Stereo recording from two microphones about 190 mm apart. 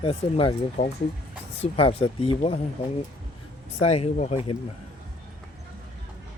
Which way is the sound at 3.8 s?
35° left (ahead or behind).